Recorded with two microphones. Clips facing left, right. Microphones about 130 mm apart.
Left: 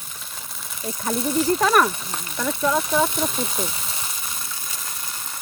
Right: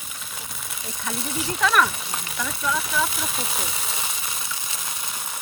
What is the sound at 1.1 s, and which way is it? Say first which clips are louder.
Speech: left 10 dB; centre (ahead or behind).